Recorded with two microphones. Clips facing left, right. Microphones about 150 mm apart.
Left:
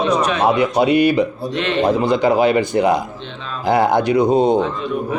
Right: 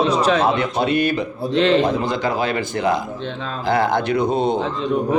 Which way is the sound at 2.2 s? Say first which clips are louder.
Left 7 dB; 15° left (ahead or behind).